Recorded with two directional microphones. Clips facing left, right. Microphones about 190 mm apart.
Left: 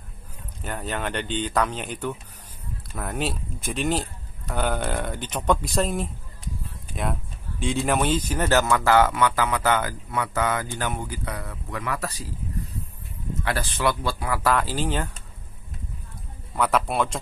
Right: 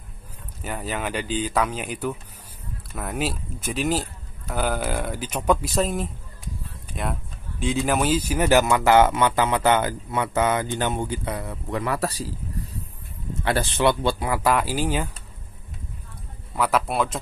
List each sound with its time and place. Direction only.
0.7 s a man's voice: 5° right (ahead or behind); by 12.3 s 35° right (ahead or behind)
13.4 s speech: 25° right (ahead or behind); by 15.0 s 10° right (ahead or behind)
16.5 s a man's voice: centre (ahead or behind)